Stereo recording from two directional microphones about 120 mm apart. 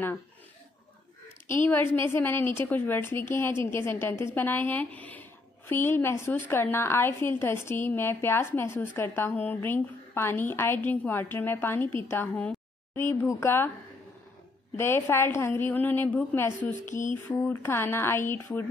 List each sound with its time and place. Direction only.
1.5 s a woman's voice: 15° left (ahead or behind)
14.8 s a woman's voice: 20° left (ahead or behind)